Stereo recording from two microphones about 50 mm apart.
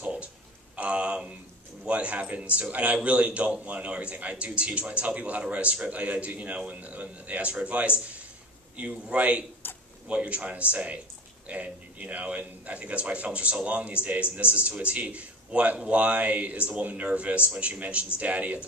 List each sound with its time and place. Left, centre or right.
0.0 s music: right
0.7 s a sound: right
1.9 s a man's voice: right